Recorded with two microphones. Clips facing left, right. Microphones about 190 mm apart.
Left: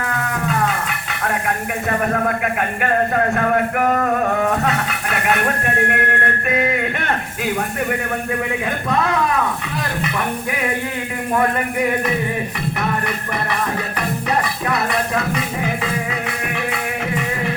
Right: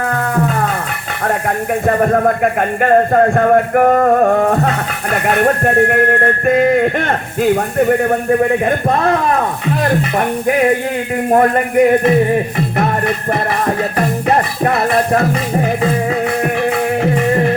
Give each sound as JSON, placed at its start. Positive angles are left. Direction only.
{"t": 0.1, "sound": "music", "side_deg": -45}
{"t": 1.9, "sound": "a man's voice", "side_deg": -45}
{"t": 14.3, "sound": "speech", "side_deg": -50}
{"t": 16.7, "sound": "music", "side_deg": -45}